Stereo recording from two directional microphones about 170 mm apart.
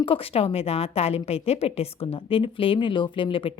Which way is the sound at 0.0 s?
35° left (ahead or behind).